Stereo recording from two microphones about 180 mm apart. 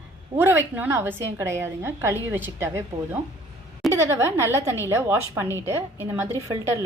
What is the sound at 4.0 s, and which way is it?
A woman's voice, 15° right (ahead or behind).